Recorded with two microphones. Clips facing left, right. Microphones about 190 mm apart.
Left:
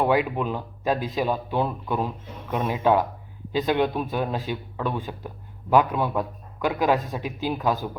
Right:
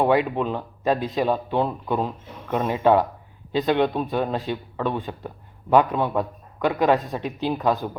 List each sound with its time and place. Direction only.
0.0 s a man's voice: centre (ahead or behind)